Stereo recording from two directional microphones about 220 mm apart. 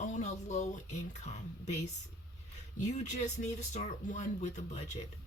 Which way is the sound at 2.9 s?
30° left (ahead or behind).